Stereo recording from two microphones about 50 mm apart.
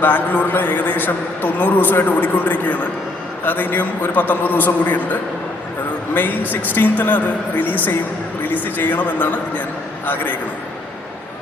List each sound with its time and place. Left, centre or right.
0.0 s a man's voice: left
6.1 s a man's voice: left